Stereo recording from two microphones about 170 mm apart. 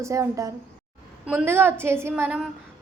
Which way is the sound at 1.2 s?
5° right (ahead or behind).